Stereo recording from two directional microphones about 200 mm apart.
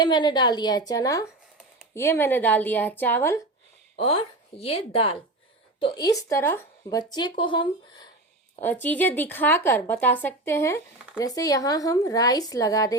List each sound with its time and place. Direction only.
0.0 s speech: 20° left (ahead or behind)
3.9 s speech: 30° left (ahead or behind)
8.6 s speech: 10° left (ahead or behind)